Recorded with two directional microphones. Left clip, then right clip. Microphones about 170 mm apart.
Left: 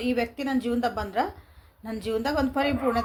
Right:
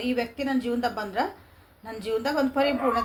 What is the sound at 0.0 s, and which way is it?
A woman's voice, 70° left (ahead or behind).